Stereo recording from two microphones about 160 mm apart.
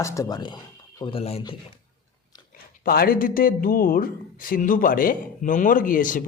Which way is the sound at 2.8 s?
65° left (ahead or behind).